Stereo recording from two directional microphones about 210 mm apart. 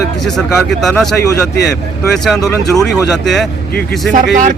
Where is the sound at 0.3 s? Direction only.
Centre (ahead or behind).